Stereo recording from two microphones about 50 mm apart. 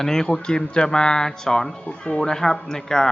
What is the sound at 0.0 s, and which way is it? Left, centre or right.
Speech, centre.